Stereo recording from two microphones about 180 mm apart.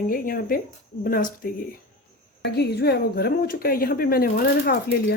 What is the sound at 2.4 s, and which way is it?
A woman's voice, 65° left (ahead or behind).